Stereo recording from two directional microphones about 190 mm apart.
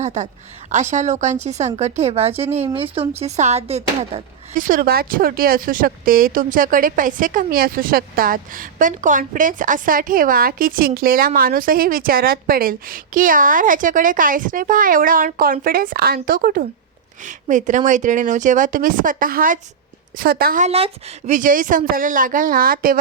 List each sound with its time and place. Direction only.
0.0 s a woman's voice: 40° right (ahead or behind)
20.7 s speech: 35° right (ahead or behind); by 23.0 s 50° right (ahead or behind)